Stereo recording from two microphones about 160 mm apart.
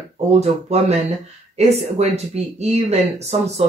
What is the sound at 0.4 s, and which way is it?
Speech, 40° right (ahead or behind).